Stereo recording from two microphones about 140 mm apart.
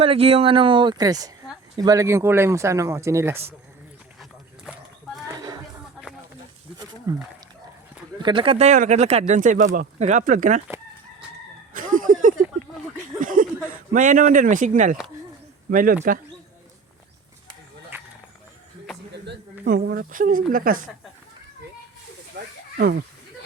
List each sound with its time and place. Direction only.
0.0 s speech: 45° right (ahead or behind); by 3.4 s 20° right (ahead or behind)
7.1 s speech: 30° right (ahead or behind); by 10.6 s 70° right (ahead or behind)
11.7 s chicken: 75° right (ahead or behind)
13.1 s a sound: 75° right (ahead or behind)
13.9 s speech: 65° right (ahead or behind)
15.7 s speech: 75° right (ahead or behind)
19.7 s speech: 90° right